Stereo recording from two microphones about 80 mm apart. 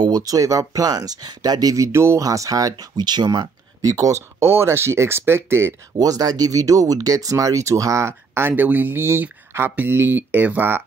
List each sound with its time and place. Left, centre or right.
0.0 s speech: right
5.9 s speech: right